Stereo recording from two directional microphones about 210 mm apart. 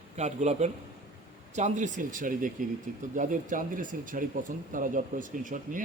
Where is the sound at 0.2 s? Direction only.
35° right (ahead or behind).